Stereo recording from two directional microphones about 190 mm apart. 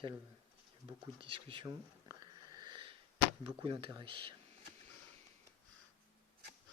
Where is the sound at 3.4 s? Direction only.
30° right (ahead or behind).